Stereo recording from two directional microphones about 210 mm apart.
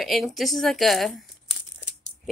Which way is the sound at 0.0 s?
Centre (ahead or behind).